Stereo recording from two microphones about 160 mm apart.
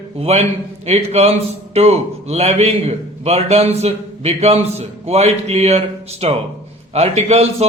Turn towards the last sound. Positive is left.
turn(degrees=-40)  # may be behind; listen again after turning